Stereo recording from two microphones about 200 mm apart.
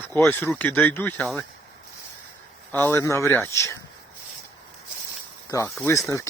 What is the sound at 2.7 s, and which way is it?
Speech, 10° left (ahead or behind).